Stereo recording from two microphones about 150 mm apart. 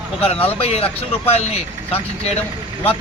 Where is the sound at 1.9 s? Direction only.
45° left (ahead or behind).